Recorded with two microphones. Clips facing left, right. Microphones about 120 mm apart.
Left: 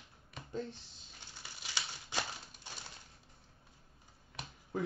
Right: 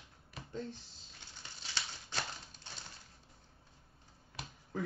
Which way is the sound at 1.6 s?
10° left (ahead or behind).